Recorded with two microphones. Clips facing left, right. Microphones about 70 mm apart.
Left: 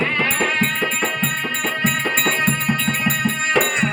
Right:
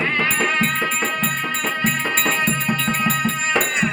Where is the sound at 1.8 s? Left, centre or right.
Centre.